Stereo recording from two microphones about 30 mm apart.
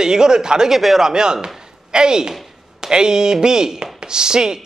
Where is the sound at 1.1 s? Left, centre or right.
Right.